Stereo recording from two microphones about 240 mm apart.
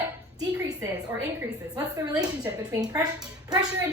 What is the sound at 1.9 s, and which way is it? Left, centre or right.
A woman's voice, centre.